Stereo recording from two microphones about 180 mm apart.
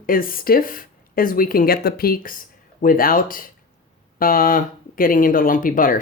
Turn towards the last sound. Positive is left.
turn(degrees=50)  # may be behind; listen again after turning